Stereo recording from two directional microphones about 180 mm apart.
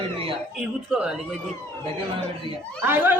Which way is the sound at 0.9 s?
5° right (ahead or behind).